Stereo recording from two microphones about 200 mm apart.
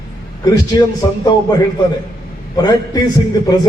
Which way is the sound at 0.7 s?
20° left (ahead or behind).